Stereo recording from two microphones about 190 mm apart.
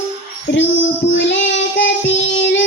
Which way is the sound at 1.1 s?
75° left (ahead or behind).